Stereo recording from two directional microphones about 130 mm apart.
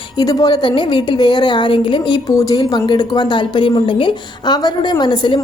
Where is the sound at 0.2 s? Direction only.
30° left (ahead or behind).